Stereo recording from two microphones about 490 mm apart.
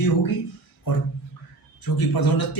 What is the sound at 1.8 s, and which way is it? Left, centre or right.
Speech, left.